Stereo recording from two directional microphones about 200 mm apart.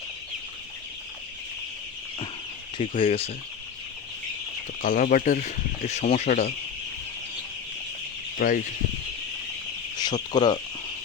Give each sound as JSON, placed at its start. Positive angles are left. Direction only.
{"t": 3.0, "sound": "speech", "side_deg": 30}
{"t": 4.8, "sound": "speech", "side_deg": 40}
{"t": 8.4, "sound": "speech", "side_deg": 45}
{"t": 10.0, "sound": "speech", "side_deg": 20}